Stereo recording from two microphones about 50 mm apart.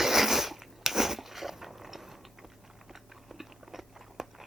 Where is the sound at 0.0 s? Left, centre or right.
Centre.